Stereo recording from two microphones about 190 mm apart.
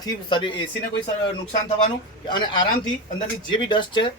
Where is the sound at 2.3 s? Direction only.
25° left (ahead or behind).